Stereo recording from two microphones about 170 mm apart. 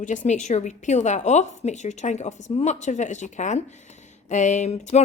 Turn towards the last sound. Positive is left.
turn(degrees=40)  # may be behind; listen again after turning